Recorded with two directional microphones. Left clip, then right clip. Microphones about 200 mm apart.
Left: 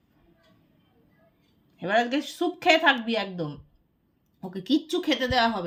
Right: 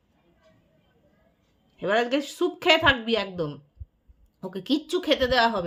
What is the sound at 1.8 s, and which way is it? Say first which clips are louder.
Speech: right 1 dB; 15° right (ahead or behind).